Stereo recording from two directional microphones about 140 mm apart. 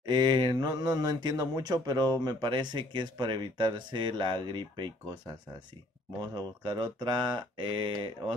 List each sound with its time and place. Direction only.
0.0 s speech: 30° right (ahead or behind)
6.3 s speech: 35° right (ahead or behind)